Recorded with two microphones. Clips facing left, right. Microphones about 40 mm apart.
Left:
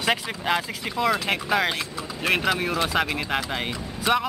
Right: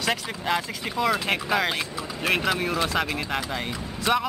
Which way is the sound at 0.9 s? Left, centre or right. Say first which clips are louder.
Left 1 dB; centre.